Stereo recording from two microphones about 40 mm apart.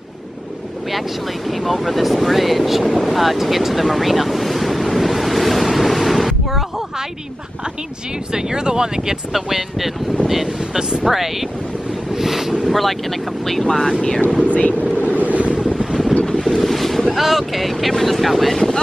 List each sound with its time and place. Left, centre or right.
1.5 s vehicle: centre
8.3 s speech: centre
9.3 s speech: centre
10.8 s speech: centre
12.2 s speech: centre
12.6 s speech: centre
13.7 s speech: centre
14.4 s speech: left
15.1 s wind noise: right
16.4 s boat: centre
17.1 s speech: centre